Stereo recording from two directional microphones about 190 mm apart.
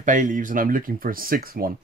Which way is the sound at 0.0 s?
45° right (ahead or behind).